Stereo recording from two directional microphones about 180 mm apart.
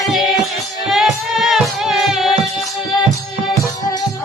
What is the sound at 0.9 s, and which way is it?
Music, centre (ahead or behind).